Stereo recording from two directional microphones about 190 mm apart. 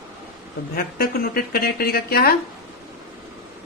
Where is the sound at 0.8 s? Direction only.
50° left (ahead or behind).